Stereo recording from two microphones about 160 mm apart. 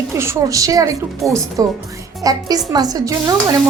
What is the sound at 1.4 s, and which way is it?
Speech, 20° right (ahead or behind).